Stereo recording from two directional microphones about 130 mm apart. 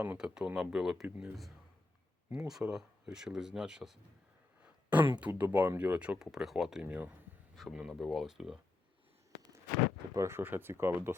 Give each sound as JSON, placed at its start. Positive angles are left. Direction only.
{"t": 0.0, "sound": "speech", "side_deg": -15}
{"t": 2.3, "sound": "speech", "side_deg": -5}
{"t": 7.5, "sound": "speech", "side_deg": 0}
{"t": 10.2, "sound": "speech", "side_deg": -20}